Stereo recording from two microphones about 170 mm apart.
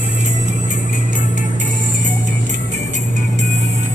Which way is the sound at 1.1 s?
50° left (ahead or behind).